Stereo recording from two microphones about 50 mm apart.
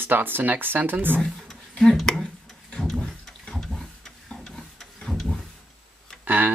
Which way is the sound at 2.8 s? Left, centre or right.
Centre.